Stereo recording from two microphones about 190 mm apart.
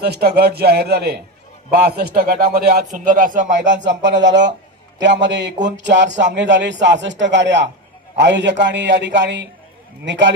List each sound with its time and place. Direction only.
0.0 s a man's voice: 55° right (ahead or behind)
3.6 s speech: 70° right (ahead or behind)